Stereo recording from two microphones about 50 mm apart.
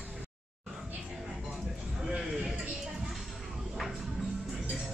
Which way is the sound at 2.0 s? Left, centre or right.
Centre.